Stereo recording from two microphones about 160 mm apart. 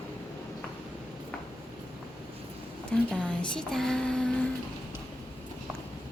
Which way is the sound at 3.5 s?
5° left (ahead or behind).